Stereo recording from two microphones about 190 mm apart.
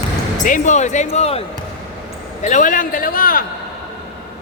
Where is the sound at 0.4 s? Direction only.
40° left (ahead or behind).